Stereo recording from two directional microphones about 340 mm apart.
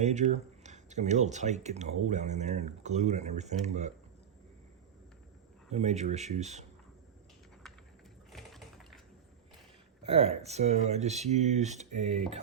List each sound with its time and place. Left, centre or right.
0.0 s speech: right
5.7 s speech: centre
8.3 s a sound: centre
10.0 s speech: centre